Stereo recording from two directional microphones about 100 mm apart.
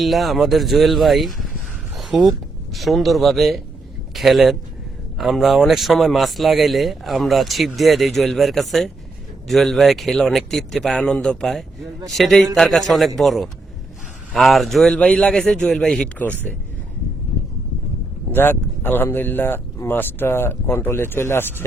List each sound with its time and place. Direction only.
0.0 s speech: centre (ahead or behind)
2.0 s a sound: 5° right (ahead or behind)
2.7 s speech: centre (ahead or behind)
18.3 s speech: 20° left (ahead or behind)